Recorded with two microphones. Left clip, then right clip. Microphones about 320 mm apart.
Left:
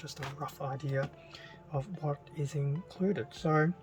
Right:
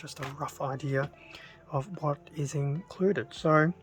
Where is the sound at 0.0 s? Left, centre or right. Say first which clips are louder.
Right 4 dB; centre.